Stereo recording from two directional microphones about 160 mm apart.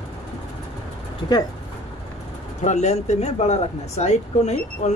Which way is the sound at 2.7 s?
45° left (ahead or behind).